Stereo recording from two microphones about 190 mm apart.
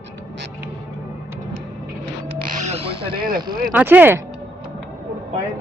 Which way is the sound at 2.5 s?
35° right (ahead or behind).